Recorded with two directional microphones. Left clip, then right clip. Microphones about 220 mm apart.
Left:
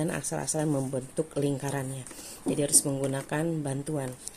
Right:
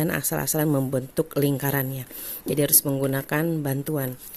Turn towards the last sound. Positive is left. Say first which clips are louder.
# right 5 dB
turn(degrees=-45)  # may be behind; listen again after turning